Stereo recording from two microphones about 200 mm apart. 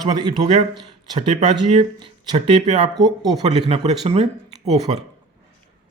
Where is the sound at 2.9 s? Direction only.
20° right (ahead or behind).